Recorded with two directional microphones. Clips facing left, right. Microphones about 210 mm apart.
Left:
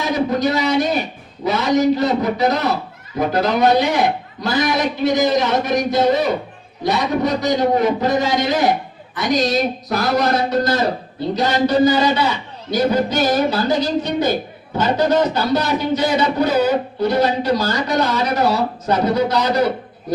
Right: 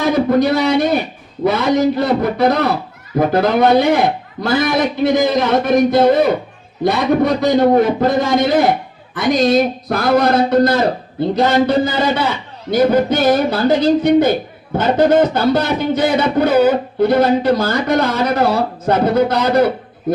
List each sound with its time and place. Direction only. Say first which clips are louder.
0.0 s a man's voice: right 5 dB; 55° right (ahead or behind)